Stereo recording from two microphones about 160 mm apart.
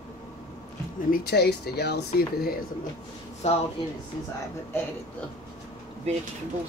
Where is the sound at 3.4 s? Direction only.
40° left (ahead or behind).